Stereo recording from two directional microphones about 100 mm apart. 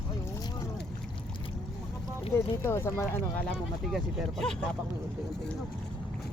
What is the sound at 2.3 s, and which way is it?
Speech, 25° left (ahead or behind).